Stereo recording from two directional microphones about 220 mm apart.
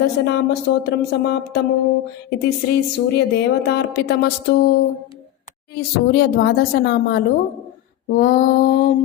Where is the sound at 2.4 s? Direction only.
45° left (ahead or behind).